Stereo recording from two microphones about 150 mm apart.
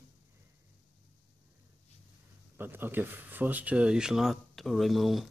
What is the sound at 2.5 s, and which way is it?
Speech, 15° right (ahead or behind).